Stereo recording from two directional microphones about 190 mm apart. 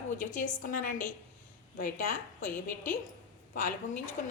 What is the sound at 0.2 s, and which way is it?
Speech, 45° left (ahead or behind).